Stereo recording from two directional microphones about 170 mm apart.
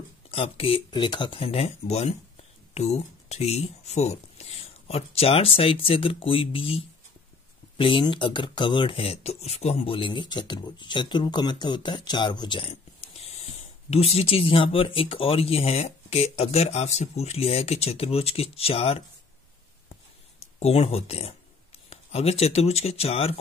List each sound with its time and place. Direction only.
0.3 s speech: 35° left (ahead or behind)
20.3 s speech: 35° left (ahead or behind)